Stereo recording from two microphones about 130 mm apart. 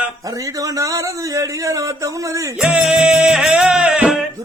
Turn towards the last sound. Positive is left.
turn(degrees=-10)  # may be behind; listen again after turning